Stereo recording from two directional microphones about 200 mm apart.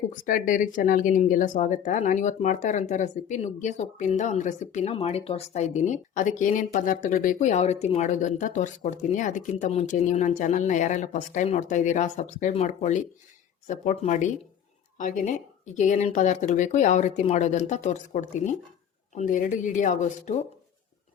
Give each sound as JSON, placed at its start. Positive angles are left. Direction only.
{"t": 0.1, "sound": "speech", "side_deg": 40}